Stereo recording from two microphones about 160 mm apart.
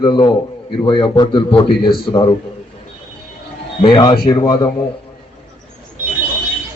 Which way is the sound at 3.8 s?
30° left (ahead or behind).